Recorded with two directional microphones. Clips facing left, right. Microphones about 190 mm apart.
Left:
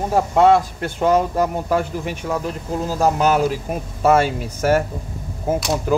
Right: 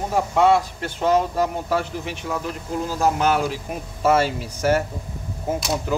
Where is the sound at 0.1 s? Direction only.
45° left (ahead or behind).